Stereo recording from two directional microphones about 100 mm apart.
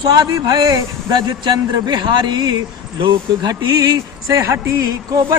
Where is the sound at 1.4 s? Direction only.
50° right (ahead or behind).